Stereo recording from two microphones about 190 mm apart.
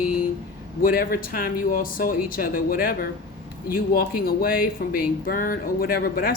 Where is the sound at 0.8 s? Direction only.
50° left (ahead or behind).